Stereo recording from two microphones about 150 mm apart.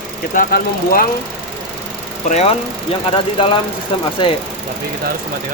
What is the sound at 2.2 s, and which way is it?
Speech, 50° left (ahead or behind).